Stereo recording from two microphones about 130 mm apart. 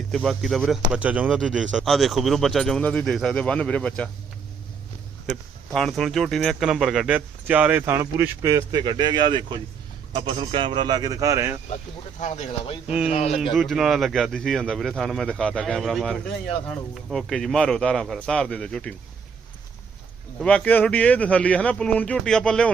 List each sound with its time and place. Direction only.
0.3 s speech: centre (ahead or behind)
5.7 s speech: 5° left (ahead or behind); by 8.8 s 25° right (ahead or behind)
8.8 s speech: 35° right (ahead or behind)
12.2 s speech: 70° left (ahead or behind)
13.1 s speech: 55° left (ahead or behind)
13.4 s speech: centre (ahead or behind)
20.4 s speech: 10° left (ahead or behind)